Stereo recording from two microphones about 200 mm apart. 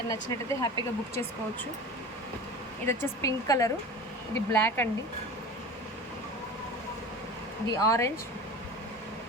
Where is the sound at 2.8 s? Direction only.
15° left (ahead or behind).